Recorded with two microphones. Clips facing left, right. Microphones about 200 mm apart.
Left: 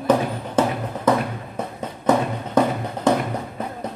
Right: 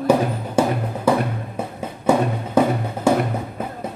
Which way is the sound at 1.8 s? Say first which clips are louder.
Right 1 dB; 10° right (ahead or behind).